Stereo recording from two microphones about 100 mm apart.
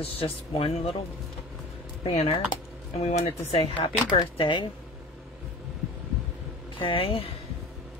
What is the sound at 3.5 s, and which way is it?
Speech, 60° left (ahead or behind).